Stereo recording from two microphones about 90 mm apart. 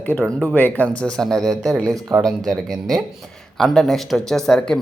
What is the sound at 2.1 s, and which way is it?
Speech, 10° right (ahead or behind).